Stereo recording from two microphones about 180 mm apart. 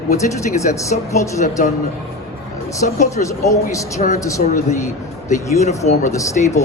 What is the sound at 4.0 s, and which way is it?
Speech, 40° left (ahead or behind).